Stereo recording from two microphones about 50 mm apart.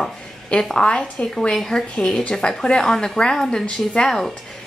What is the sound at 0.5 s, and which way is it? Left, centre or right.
A woman's voice, centre.